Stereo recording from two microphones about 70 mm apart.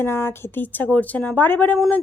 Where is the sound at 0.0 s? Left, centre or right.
Left.